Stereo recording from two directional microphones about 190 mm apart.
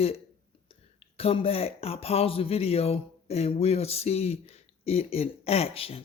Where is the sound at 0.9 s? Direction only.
30° left (ahead or behind).